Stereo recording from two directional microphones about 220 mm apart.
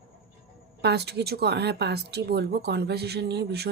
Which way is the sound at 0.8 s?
50° right (ahead or behind).